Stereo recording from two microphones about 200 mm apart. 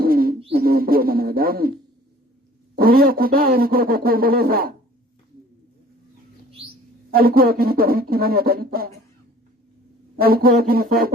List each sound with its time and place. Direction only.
0.0 s a sound: 45° right (ahead or behind)
0.5 s speech: 50° right (ahead or behind)
2.7 s speech: 45° right (ahead or behind)
7.1 s speech: 45° right (ahead or behind)
10.2 s speech: 50° right (ahead or behind)